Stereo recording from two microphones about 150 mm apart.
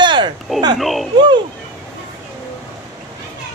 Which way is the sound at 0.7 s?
Centre (ahead or behind).